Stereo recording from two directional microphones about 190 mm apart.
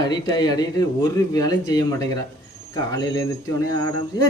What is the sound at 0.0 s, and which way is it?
A man's voice, 20° left (ahead or behind).